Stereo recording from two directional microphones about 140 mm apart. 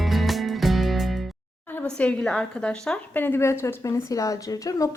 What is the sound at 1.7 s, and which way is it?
A woman's voice, 10° left (ahead or behind).